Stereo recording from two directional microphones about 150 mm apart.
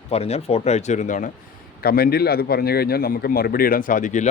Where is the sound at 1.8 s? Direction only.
85° left.